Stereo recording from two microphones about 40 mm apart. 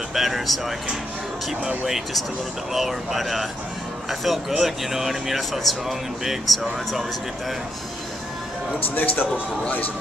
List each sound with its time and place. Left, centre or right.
0.1 s speech: centre
1.9 s speech: centre
8.9 s speech: left